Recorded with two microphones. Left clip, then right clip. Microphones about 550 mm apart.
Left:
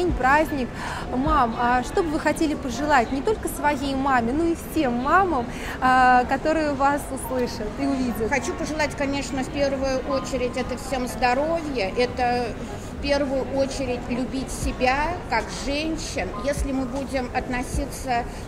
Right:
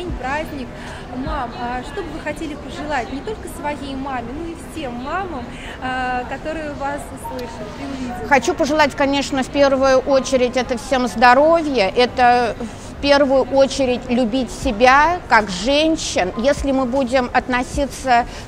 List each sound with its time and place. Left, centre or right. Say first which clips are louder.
0.2 s speech: left 5 dB; left
3.6 s a sound: left 3 dB; left
8.3 s a woman's voice: right 10 dB; right